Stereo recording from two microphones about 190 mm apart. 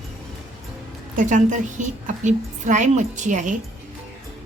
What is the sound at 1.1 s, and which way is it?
A woman's voice, 40° right (ahead or behind).